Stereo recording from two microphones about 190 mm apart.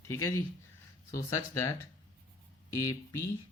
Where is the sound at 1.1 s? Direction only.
15° left (ahead or behind).